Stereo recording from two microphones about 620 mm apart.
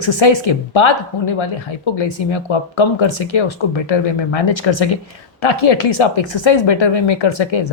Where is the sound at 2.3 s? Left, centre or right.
Left.